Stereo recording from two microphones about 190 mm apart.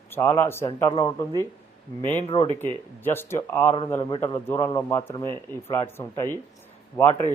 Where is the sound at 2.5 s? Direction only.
10° left (ahead or behind).